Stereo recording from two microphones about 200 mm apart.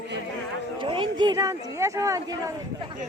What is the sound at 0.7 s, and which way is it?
Speech, 25° right (ahead or behind).